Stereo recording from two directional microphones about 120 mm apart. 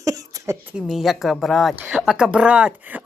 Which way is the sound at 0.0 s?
30° right (ahead or behind).